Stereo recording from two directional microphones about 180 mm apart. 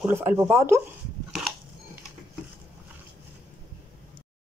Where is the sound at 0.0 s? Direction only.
15° right (ahead or behind).